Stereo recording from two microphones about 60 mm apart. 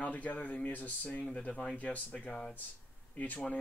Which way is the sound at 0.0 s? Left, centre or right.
Left.